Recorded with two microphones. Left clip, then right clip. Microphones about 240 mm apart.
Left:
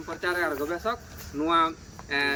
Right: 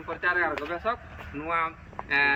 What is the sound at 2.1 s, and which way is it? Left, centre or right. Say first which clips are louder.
Speech: right 3 dB; centre.